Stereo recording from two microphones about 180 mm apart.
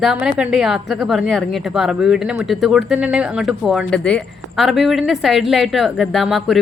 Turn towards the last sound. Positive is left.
turn(degrees=0)  # may be behind; listen again after turning